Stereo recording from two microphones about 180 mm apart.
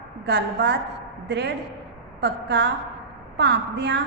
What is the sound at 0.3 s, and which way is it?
A woman's voice, 70° right (ahead or behind).